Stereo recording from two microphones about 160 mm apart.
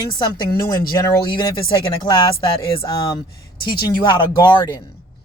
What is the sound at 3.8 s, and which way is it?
Speech, 30° left (ahead or behind).